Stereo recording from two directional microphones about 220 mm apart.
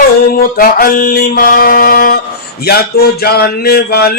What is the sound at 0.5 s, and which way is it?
Mantra, 40° left (ahead or behind).